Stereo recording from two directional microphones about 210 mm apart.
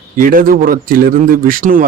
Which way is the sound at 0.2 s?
40° right (ahead or behind).